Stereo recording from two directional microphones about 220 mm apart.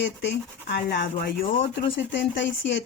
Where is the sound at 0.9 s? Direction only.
45° left (ahead or behind).